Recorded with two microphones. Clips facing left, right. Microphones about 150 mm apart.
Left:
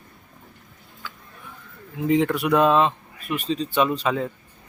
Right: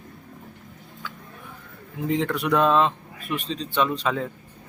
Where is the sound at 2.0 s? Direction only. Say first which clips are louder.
Left 4 dB; 5° left (ahead or behind).